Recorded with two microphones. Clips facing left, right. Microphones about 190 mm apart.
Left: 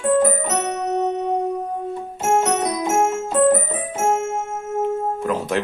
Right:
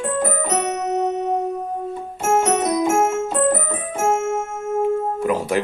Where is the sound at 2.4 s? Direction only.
10° right (ahead or behind).